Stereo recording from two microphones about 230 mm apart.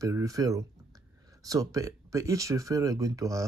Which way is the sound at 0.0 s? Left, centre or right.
Centre.